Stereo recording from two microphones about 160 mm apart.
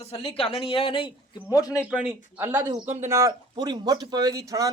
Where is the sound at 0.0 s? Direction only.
40° left (ahead or behind); by 1.9 s 20° left (ahead or behind).